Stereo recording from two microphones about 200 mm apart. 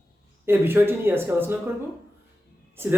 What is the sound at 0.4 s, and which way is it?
Speech, 10° right (ahead or behind).